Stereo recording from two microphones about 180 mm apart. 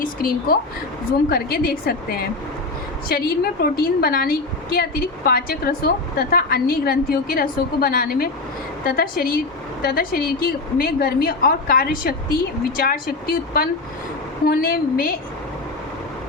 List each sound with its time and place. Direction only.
0.0 s a woman's voice: 55° left (ahead or behind)